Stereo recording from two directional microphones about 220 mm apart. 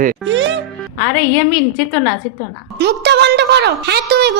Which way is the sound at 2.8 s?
50° right (ahead or behind).